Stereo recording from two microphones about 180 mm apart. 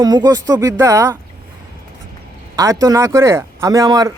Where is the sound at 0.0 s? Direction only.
20° right (ahead or behind).